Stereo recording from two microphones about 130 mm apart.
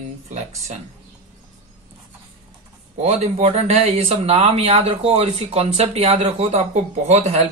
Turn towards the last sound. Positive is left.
turn(degrees=-60)  # may be behind; listen again after turning